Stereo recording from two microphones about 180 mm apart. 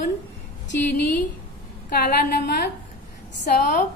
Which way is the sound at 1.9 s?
60° left (ahead or behind).